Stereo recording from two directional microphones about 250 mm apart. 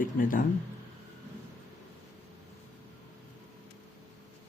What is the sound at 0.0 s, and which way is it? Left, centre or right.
Speech, left.